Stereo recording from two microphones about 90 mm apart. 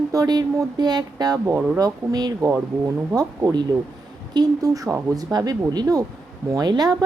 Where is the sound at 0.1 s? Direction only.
45° right (ahead or behind).